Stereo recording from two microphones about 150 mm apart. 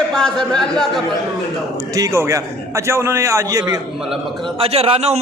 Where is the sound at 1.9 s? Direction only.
20° right (ahead or behind).